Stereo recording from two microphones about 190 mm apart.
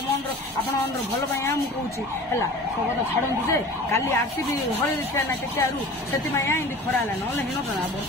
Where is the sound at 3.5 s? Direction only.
15° left (ahead or behind).